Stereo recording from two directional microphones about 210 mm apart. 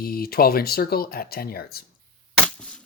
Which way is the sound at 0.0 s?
45° left (ahead or behind).